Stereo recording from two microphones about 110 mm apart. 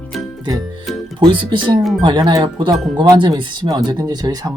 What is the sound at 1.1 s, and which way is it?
Speech, 45° right (ahead or behind).